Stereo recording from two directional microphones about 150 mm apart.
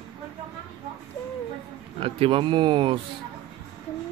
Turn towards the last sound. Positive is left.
turn(degrees=-35)  # may be behind; listen again after turning